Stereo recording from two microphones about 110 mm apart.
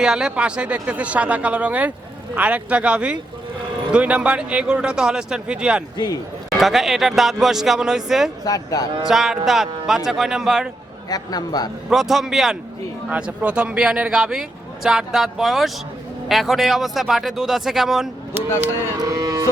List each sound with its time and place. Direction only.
0.0 s speech: 5° right (ahead or behind)
8.4 s a man's voice: 35° left (ahead or behind)
9.0 s speech: 5° right (ahead or behind)
11.1 s a man's voice: 35° left (ahead or behind)
11.9 s speech: centre (ahead or behind)
18.9 s music: 35° right (ahead or behind)